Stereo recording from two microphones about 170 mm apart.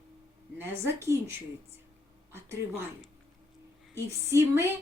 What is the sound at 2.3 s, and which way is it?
Speech, 15° right (ahead or behind).